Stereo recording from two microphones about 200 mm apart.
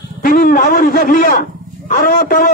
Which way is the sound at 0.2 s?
45° left (ahead or behind).